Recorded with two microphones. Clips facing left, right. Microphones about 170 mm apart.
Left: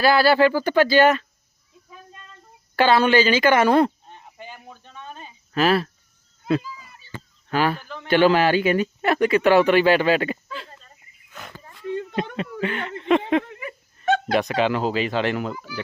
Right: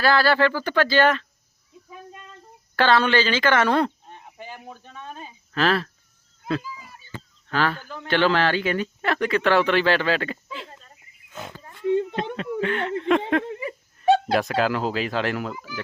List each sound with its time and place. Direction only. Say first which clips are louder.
0.0 s speech: left 3 dB; 10° left (ahead or behind)
2.7 s speech: left 3 dB; 10° left (ahead or behind)
4.1 s a sound: right 1 dB; 5° right (ahead or behind)
5.5 s speech: left 3 dB; 10° left (ahead or behind)
7.5 s speech: left 2 dB; 10° left (ahead or behind)
11.6 s oink: right 6 dB; centre (ahead or behind)
12.4 s speech: right 2 dB; 5° left (ahead or behind)
13.4 s laughter: right 5 dB; 30° right (ahead or behind)
14.3 s speech: left 1 dB; centre (ahead or behind)